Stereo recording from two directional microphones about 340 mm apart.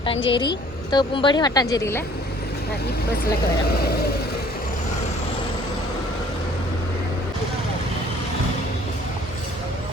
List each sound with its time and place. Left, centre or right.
0.3 s a woman's voice: centre
3.7 s speech: left